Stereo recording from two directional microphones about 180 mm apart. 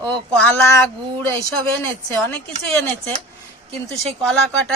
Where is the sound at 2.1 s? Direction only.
10° left (ahead or behind).